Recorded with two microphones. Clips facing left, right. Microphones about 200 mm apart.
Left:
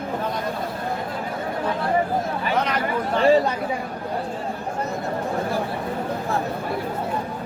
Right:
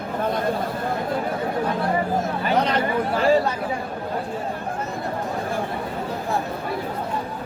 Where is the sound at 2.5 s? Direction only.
30° right (ahead or behind).